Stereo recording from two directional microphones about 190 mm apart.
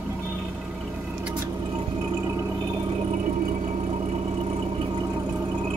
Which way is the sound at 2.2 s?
15° right (ahead or behind).